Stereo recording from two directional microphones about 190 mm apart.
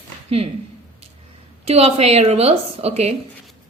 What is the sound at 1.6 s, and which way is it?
A woman's voice, 35° right (ahead or behind).